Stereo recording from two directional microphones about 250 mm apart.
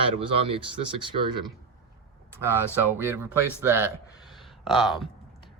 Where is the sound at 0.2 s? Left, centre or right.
Right.